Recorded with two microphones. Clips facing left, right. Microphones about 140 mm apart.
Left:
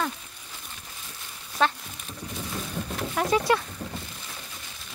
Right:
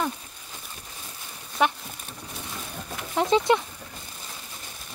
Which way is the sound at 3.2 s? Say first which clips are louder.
Right 3 dB; 20° right (ahead or behind).